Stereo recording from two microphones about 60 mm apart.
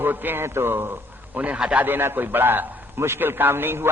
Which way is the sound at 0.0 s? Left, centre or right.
Right.